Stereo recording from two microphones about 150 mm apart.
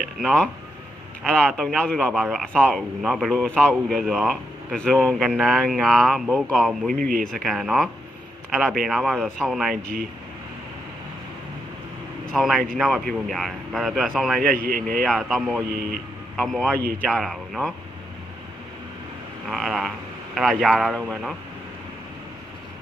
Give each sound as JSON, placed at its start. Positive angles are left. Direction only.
{"t": 0.2, "sound": "speech", "side_deg": 0}
{"t": 2.1, "sound": "speech", "side_deg": -10}
{"t": 2.6, "sound": "speech", "side_deg": 0}
{"t": 12.3, "sound": "speech", "side_deg": 0}
{"t": 15.7, "sound": "speech", "side_deg": -90}
{"t": 16.4, "sound": "speech", "side_deg": 5}
{"t": 19.5, "sound": "speech", "side_deg": 0}